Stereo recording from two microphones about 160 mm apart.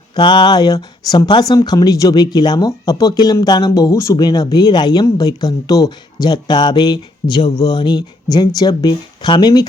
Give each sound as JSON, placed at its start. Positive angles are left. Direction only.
{"t": 0.2, "sound": "speech", "side_deg": 25}